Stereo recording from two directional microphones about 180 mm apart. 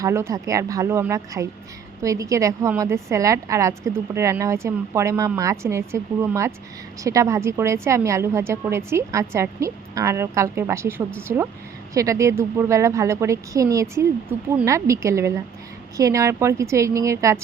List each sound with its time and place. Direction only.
0.0 s a woman's voice: 15° right (ahead or behind)